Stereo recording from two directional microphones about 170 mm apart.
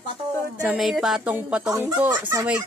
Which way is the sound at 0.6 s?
Centre (ahead or behind).